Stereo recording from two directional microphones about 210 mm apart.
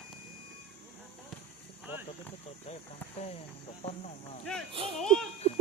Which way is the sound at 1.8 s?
10° right (ahead or behind).